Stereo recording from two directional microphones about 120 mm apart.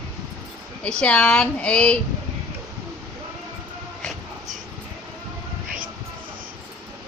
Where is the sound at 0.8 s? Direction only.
10° left (ahead or behind).